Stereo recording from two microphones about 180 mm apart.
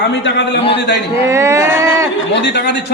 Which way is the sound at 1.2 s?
15° right (ahead or behind).